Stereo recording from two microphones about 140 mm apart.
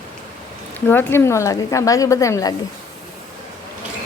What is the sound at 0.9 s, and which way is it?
A woman's voice, 15° left (ahead or behind).